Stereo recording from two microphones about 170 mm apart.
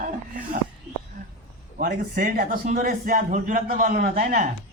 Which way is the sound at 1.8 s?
55° right (ahead or behind).